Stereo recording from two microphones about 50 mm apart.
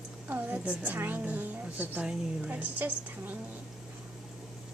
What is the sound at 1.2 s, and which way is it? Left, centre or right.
A woman's voice, right.